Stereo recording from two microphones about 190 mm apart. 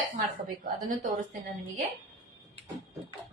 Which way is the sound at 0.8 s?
45° right (ahead or behind).